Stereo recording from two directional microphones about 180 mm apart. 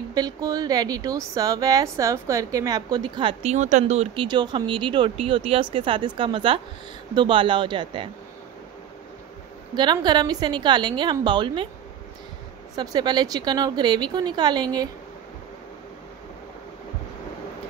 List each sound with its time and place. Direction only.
0.1 s a woman's voice: 20° right (ahead or behind)
3.5 s a woman's voice: 40° right (ahead or behind)
9.9 s a woman's voice: 25° right (ahead or behind)
12.7 s a woman's voice: 20° right (ahead or behind)